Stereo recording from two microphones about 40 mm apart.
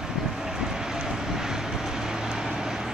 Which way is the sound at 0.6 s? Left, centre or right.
Centre.